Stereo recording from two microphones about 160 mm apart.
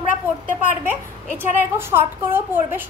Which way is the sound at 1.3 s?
15° right (ahead or behind).